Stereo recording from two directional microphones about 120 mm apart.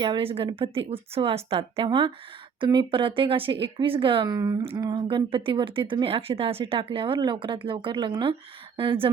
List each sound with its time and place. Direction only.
0.0 s speech: 45° right (ahead or behind)